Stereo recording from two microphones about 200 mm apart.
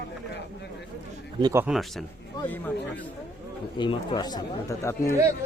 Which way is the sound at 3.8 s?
25° left (ahead or behind).